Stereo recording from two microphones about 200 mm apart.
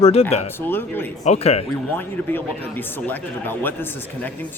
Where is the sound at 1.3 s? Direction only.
30° left (ahead or behind).